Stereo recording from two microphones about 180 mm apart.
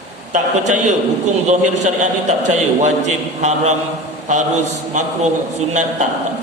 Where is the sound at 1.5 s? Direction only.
45° right (ahead or behind).